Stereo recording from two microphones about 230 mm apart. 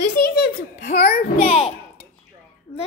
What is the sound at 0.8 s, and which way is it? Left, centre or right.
Speech, left.